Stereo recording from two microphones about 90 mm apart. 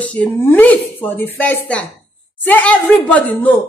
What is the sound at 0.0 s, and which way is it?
A woman's voice, 15° left (ahead or behind).